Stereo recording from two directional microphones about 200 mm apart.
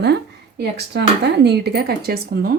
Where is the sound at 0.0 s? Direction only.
55° right (ahead or behind).